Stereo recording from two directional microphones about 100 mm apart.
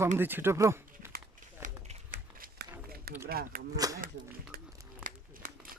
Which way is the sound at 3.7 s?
35° right (ahead or behind).